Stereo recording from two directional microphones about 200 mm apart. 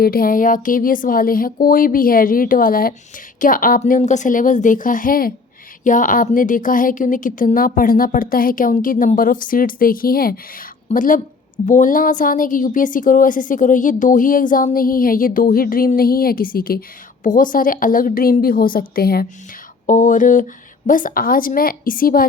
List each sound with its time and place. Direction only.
0.0 s a woman's voice: 50° left (ahead or behind)